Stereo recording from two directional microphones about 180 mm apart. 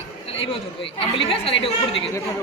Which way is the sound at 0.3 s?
30° left (ahead or behind).